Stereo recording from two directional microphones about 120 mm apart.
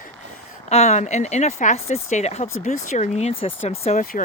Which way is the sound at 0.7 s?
70° left (ahead or behind).